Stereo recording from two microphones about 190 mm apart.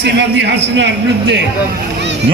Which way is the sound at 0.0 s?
65° right (ahead or behind).